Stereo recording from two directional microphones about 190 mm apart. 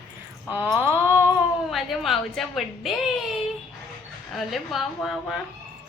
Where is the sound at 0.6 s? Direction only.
10° right (ahead or behind).